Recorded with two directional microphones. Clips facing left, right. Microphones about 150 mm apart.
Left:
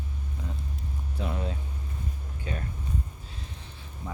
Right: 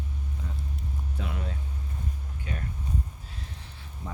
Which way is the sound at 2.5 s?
30° left (ahead or behind).